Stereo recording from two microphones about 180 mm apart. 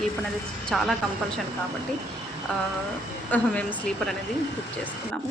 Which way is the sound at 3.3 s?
5° left (ahead or behind).